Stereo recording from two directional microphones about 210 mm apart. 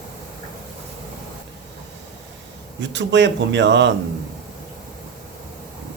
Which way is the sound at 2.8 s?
60° right (ahead or behind).